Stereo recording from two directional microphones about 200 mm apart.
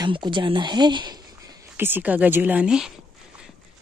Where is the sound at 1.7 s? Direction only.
10° right (ahead or behind).